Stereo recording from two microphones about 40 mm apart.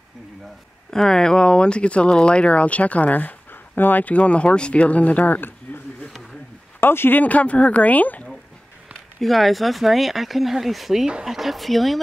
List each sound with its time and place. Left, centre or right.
0.9 s speech: centre; by 4.0 s left
4.0 s speech: left
6.8 s speech: left
7.2 s speech: left
9.2 s speech: centre